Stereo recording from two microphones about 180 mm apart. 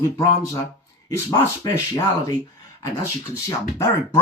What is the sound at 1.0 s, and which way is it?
Speech, 15° left (ahead or behind).